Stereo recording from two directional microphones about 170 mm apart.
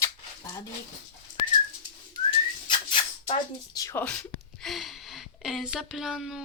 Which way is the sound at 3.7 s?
20° left (ahead or behind).